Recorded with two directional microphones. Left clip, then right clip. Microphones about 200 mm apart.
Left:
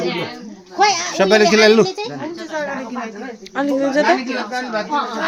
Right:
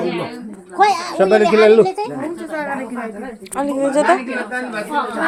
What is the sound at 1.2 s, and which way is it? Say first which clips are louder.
Speech: even; 55° left (ahead or behind).